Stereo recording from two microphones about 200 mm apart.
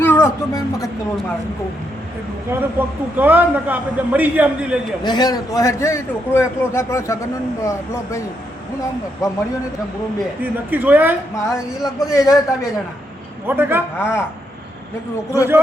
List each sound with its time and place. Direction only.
0.0 s speech: 10° left (ahead or behind)
2.6 s a man's voice: 10° right (ahead or behind)
5.0 s a man's voice: 20° left (ahead or behind)
9.2 s a man's voice: 15° left (ahead or behind)
10.4 s a man's voice: 10° right (ahead or behind)
11.4 s a man's voice: 15° left (ahead or behind)
13.5 s a man's voice: 10° right (ahead or behind)
14.0 s a man's voice: 10° left (ahead or behind)